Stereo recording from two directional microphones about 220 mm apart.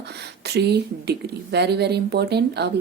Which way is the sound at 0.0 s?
50° right (ahead or behind).